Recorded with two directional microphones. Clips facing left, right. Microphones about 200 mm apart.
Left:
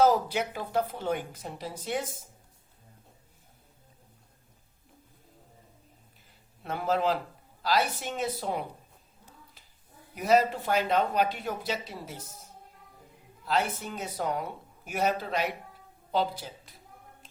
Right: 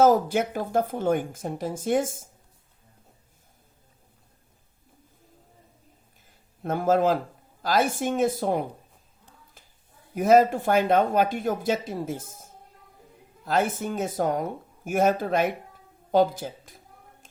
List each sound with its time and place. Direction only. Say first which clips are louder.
0.0 s speech: right 4 dB; 45° right (ahead or behind)
6.6 s speech: right 7 dB; 45° right (ahead or behind)
10.2 s speech: right 6 dB; 50° right (ahead or behind)